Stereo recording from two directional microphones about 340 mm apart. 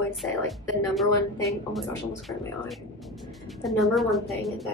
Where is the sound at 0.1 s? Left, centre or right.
Centre.